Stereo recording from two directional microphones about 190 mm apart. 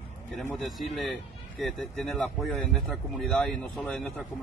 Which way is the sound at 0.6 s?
Centre (ahead or behind).